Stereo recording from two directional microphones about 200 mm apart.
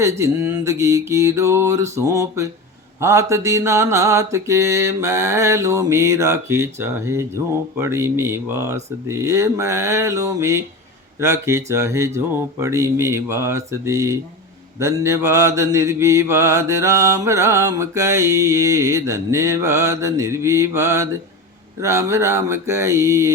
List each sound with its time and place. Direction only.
0.0 s mantra: 15° right (ahead or behind)